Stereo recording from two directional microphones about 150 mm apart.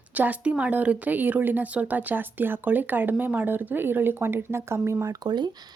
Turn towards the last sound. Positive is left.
turn(degrees=-30)  # may be behind; listen again after turning